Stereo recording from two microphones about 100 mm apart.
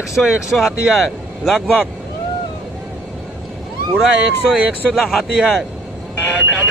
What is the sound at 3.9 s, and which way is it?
Speech, 5° right (ahead or behind).